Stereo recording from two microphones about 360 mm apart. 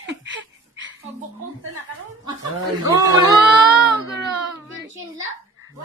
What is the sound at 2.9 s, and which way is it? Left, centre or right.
Speech, centre.